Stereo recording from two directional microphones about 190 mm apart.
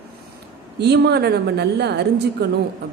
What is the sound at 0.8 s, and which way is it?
A woman's voice, 60° right (ahead or behind).